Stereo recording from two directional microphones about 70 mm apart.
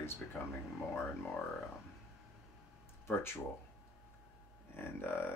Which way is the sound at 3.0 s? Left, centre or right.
Left.